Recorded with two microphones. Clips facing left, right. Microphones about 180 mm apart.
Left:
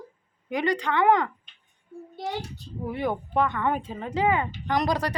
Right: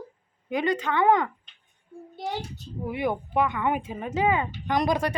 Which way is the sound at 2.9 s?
10° right (ahead or behind).